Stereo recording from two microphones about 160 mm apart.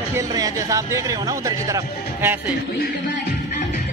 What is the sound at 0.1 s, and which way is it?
Speech, 20° right (ahead or behind).